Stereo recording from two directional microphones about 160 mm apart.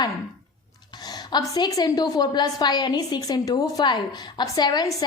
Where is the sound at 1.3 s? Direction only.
25° left (ahead or behind).